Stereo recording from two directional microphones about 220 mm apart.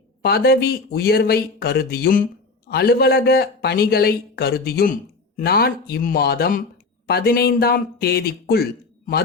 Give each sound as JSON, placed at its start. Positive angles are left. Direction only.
{"t": 0.2, "sound": "speech", "side_deg": 45}